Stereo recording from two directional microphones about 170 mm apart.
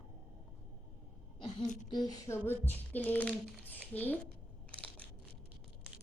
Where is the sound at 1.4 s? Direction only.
40° left (ahead or behind).